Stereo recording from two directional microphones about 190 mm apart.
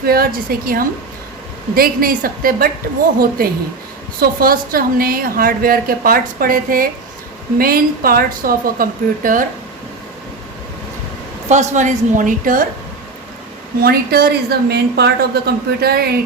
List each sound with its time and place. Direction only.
0.0 s a woman's voice: 50° right (ahead or behind)
11.4 s a woman's voice: 40° right (ahead or behind)
13.8 s speech: 55° right (ahead or behind)